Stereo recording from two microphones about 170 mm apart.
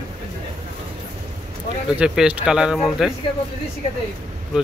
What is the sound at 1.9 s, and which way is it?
Speech, 5° right (ahead or behind).